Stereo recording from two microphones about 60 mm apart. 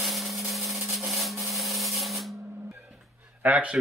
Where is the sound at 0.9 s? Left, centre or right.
Centre.